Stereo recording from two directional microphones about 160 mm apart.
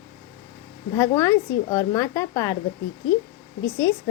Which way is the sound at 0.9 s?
20° left (ahead or behind).